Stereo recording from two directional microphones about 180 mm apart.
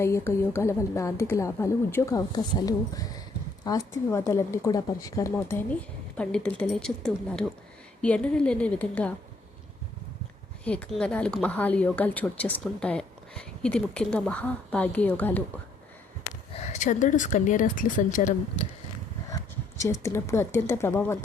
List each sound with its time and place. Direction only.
0.0 s a woman's voice: 15° left (ahead or behind)
10.6 s speech: 5° left (ahead or behind)
16.6 s speech: 40° left (ahead or behind)
19.8 s speech: 15° left (ahead or behind)